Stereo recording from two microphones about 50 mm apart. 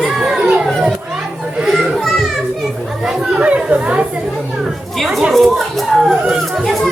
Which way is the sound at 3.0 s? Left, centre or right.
Centre.